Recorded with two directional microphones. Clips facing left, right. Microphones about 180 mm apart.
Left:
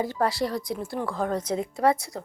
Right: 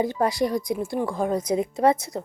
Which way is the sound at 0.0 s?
15° right (ahead or behind).